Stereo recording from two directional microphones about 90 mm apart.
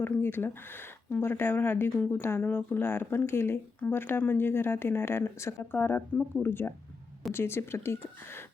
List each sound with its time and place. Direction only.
0.0 s speech: 20° left (ahead or behind)